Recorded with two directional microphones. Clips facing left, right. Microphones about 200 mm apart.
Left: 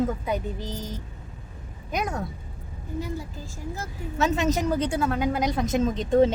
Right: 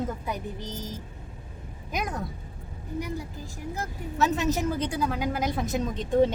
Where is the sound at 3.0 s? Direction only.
15° right (ahead or behind).